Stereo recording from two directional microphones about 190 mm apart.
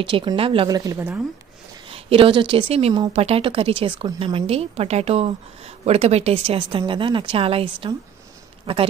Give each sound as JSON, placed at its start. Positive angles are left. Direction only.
{"t": 0.0, "sound": "a woman's voice", "side_deg": -25}
{"t": 1.9, "sound": "a woman's voice", "side_deg": -30}